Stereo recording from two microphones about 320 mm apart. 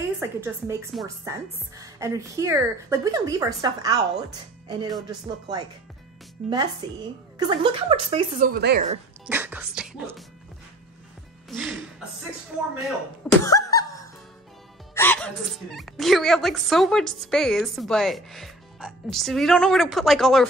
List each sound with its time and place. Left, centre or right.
0.2 s a woman's voice: centre
6.8 s a woman's voice: centre; by 8.8 s right
9.2 s speech: centre
11.4 s speech: centre
12.8 s speech: centre